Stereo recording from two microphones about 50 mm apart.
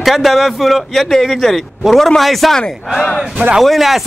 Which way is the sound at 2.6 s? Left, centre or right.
Centre.